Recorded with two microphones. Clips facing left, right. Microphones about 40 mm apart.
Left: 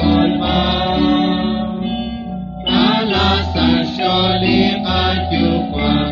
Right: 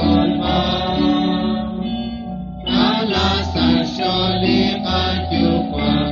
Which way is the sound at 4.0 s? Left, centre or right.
Left.